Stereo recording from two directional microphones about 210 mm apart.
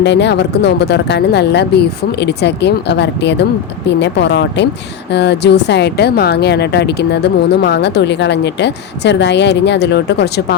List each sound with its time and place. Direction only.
0.0 s speech: 55° left (ahead or behind)